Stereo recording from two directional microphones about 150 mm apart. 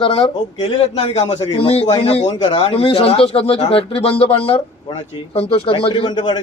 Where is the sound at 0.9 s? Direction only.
45° left (ahead or behind).